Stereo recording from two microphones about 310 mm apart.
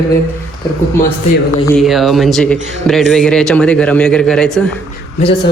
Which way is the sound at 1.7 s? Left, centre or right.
Centre.